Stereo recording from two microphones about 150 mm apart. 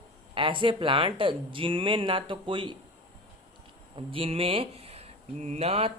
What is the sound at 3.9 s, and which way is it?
Speech, 35° right (ahead or behind).